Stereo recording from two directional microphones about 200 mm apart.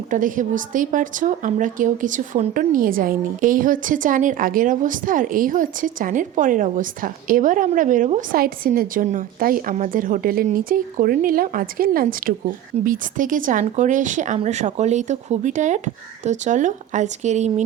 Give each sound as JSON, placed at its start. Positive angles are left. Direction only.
{"t": 0.1, "sound": "a woman's voice", "side_deg": -40}